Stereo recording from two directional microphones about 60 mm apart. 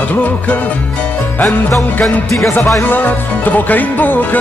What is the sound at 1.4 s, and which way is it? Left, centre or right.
Music, centre.